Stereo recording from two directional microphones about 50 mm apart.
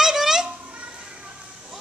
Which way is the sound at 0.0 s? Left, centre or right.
Centre.